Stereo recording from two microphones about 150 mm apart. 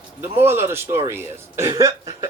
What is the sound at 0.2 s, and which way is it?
Speech, 15° right (ahead or behind).